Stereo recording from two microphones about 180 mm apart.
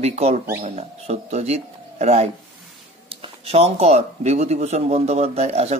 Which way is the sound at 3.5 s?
35° right (ahead or behind).